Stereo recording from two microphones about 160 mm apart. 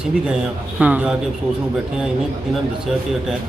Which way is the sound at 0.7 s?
10° right (ahead or behind).